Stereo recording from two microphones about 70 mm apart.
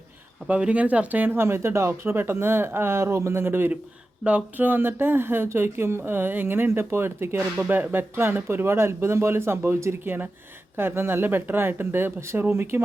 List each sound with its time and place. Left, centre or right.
0.4 s speech: centre; by 3.7 s right
4.3 s speech: right
7.6 s speech: right